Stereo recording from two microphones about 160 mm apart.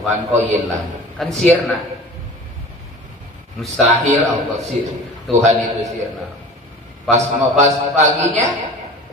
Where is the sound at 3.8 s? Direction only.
45° right (ahead or behind).